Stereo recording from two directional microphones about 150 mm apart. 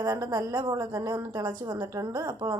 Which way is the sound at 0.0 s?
25° right (ahead or behind).